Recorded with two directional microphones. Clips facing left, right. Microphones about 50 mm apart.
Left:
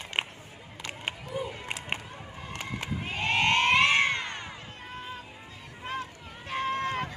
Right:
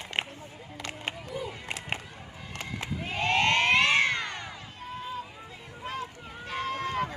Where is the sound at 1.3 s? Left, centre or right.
Centre.